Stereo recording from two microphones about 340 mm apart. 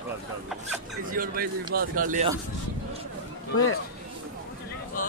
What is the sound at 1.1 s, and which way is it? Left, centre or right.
Speech, right.